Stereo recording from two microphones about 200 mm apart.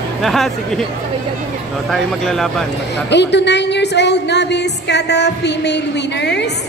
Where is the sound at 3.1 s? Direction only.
60° left (ahead or behind).